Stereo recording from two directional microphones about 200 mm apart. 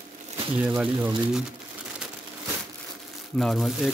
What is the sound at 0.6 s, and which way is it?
Speech, 5° right (ahead or behind).